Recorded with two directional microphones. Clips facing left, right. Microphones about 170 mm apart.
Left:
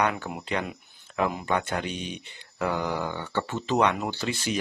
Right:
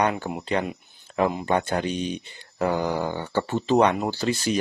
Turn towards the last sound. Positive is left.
turn(degrees=-35)  # may be behind; listen again after turning